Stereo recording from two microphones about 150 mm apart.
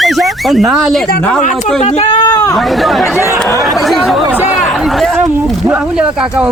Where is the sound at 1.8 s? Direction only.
45° left (ahead or behind).